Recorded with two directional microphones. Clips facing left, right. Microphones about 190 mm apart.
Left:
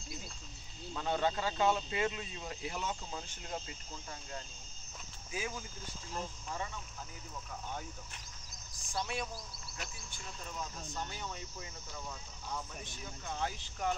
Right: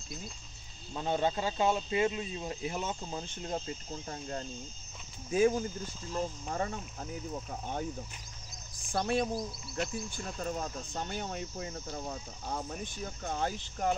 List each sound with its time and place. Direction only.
0.9 s speech: 20° right (ahead or behind)
3.4 s cricket: 35° right (ahead or behind)
5.3 s cricket: 50° right (ahead or behind)
8.8 s cricket: 55° right (ahead or behind)